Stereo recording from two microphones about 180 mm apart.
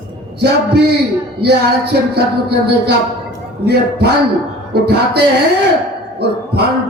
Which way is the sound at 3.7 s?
65° right (ahead or behind).